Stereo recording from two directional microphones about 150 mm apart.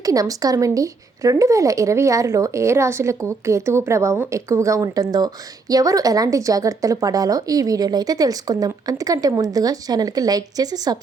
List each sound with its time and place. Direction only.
0.0 s speech: 25° right (ahead or behind)